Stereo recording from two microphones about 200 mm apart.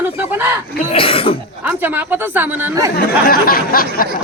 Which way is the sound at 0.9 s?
30° left (ahead or behind).